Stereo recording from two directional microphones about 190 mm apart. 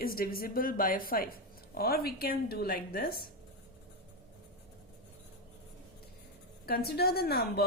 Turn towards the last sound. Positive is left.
turn(degrees=55)  # may be behind; listen again after turning